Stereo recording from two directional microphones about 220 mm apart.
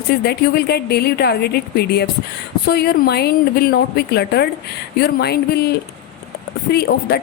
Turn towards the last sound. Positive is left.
turn(degrees=45)  # may be behind; listen again after turning